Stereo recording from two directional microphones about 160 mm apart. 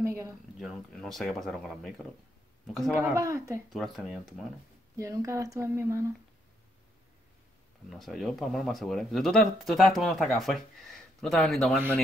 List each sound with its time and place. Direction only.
0.0 s a sound: 20° right (ahead or behind)
0.6 s speech: centre (ahead or behind)
2.9 s speech: 15° right (ahead or behind)
3.7 s speech: centre (ahead or behind)
4.9 s speech: 20° right (ahead or behind)
7.9 s speech: centre (ahead or behind)